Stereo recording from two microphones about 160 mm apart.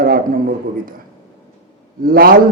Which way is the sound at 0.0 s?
65° right (ahead or behind).